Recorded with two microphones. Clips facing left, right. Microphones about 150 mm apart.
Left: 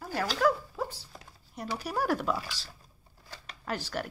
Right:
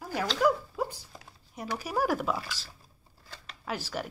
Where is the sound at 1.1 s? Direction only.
5° right (ahead or behind).